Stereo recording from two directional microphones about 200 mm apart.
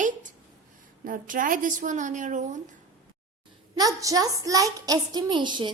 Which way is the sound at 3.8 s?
15° right (ahead or behind).